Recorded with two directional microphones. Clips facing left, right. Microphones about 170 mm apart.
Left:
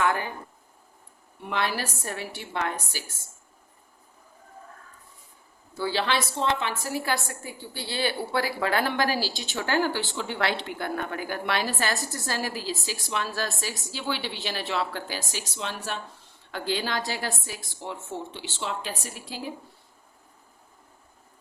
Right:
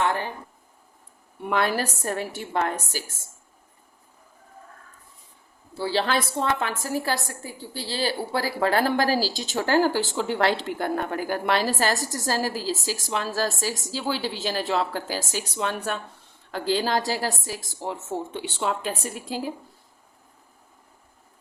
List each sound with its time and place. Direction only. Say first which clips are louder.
0.0 s speech: right 1 dB; 35° right (ahead or behind)
1.5 s a woman's voice: right 5 dB; 50° right (ahead or behind)
5.7 s a woman's voice: right 2 dB; 35° right (ahead or behind)
6.1 s a woman's voice: right 2 dB; 50° right (ahead or behind)
16.5 s a woman's voice: right 5 dB; 40° right (ahead or behind)